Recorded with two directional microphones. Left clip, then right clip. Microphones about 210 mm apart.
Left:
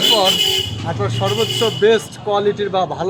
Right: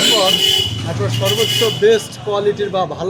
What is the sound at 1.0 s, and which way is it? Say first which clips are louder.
A man's voice: right 2 dB; 30° left (ahead or behind).